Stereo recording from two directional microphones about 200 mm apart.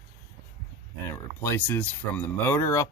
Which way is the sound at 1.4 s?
10° left (ahead or behind).